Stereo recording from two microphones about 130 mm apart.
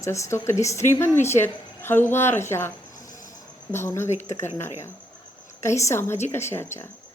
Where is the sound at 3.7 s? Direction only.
20° left (ahead or behind).